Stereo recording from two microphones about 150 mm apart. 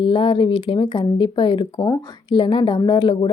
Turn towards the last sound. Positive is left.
turn(degrees=35)  # may be behind; listen again after turning